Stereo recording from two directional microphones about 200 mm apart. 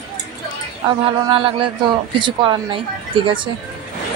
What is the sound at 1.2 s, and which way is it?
Speech, 25° right (ahead or behind).